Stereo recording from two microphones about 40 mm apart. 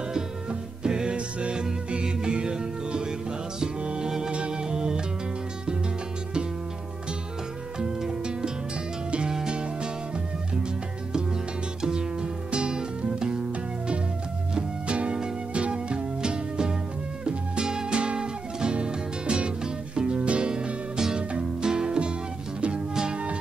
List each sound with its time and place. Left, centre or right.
0.1 s music: centre
7.8 s music: centre
11.8 s music: right
14.5 s music: right